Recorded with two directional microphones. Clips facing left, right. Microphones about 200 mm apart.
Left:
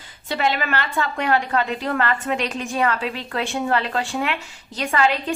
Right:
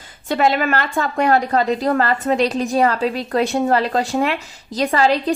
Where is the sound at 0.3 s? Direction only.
45° right (ahead or behind).